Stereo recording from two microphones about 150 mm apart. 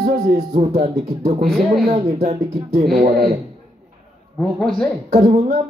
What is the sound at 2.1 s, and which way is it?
Speech, 45° right (ahead or behind).